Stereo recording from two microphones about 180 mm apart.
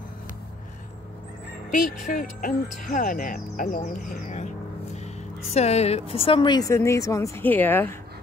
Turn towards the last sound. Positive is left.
turn(degrees=10)  # may be behind; listen again after turning